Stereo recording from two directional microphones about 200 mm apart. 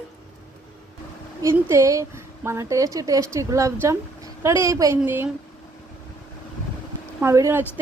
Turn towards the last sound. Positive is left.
turn(degrees=-15)  # may be behind; listen again after turning